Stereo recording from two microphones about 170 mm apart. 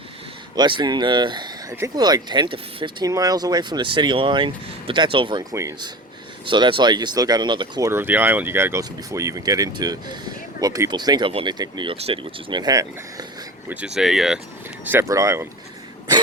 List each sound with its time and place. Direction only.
0.5 s speech: 25° right (ahead or behind)
13.7 s speech: 5° right (ahead or behind)
14.8 s speech: 15° right (ahead or behind)